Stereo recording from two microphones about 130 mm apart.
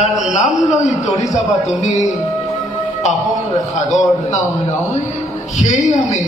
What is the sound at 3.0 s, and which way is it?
Speech, 60° left (ahead or behind).